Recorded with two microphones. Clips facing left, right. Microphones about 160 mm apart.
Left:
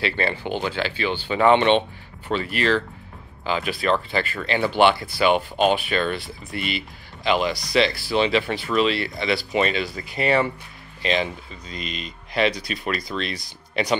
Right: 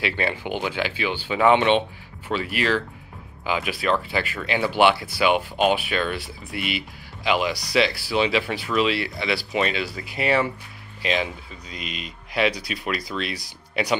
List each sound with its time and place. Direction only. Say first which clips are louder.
0.0 s speech: left 1 dB; 10° right (ahead or behind)